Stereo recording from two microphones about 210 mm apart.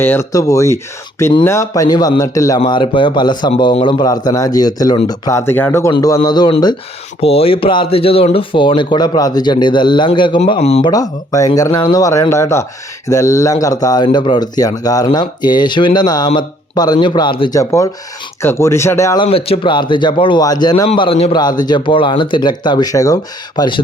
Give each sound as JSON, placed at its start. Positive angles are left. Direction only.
{"t": 0.0, "sound": "speech", "side_deg": 10}